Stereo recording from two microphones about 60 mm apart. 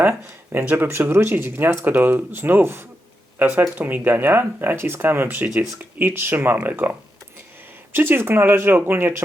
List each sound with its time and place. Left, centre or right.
0.5 s speech: right
0.9 s speech: right